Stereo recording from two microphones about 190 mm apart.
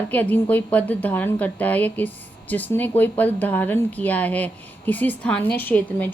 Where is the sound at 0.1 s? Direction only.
10° left (ahead or behind).